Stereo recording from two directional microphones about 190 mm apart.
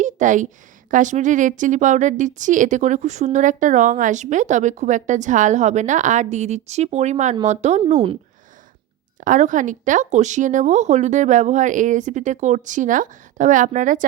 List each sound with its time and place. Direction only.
0.0 s a sound: 40° right (ahead or behind)
0.9 s a woman's voice: 40° right (ahead or behind)
9.2 s a woman's voice: 40° right (ahead or behind)